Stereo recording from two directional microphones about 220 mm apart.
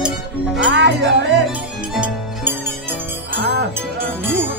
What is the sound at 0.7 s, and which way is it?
Music, 50° right (ahead or behind).